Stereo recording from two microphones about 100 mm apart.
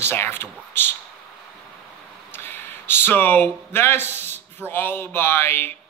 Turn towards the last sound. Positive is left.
turn(degrees=25)  # may be behind; listen again after turning